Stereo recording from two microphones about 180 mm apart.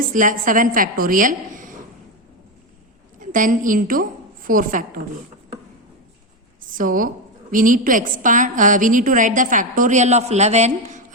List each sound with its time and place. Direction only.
0.1 s a woman's voice: 45° right (ahead or behind)
3.2 s a woman's voice: 45° right (ahead or behind)
6.7 s a woman's voice: 50° right (ahead or behind)